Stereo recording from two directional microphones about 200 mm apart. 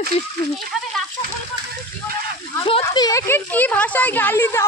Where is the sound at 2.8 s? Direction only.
20° left (ahead or behind).